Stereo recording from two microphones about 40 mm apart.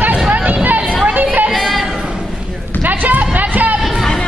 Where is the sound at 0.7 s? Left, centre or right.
Right.